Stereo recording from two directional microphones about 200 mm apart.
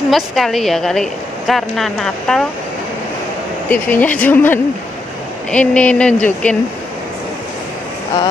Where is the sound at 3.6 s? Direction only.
10° left (ahead or behind).